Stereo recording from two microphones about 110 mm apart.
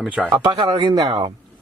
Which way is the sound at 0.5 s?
40° right (ahead or behind).